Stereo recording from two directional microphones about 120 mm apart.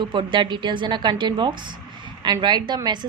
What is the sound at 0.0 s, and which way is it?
Speech, 45° right (ahead or behind).